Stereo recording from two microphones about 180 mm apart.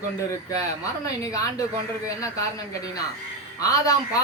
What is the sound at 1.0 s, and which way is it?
A woman's voice, 20° left (ahead or behind).